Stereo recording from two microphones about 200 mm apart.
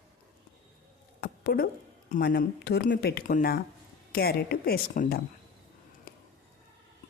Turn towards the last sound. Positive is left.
turn(degrees=50)  # may be behind; listen again after turning